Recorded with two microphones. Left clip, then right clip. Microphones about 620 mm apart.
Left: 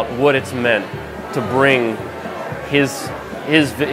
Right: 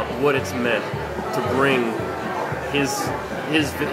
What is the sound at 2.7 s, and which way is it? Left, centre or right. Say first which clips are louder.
Speech: left 6 dB; left.